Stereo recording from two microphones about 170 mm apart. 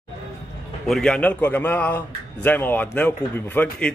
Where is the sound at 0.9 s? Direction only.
5° left (ahead or behind).